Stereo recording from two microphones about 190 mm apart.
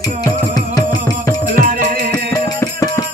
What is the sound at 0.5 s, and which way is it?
Music, 20° left (ahead or behind).